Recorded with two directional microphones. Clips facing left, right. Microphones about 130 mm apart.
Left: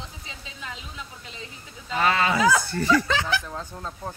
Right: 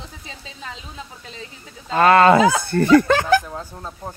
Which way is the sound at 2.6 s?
55° right (ahead or behind).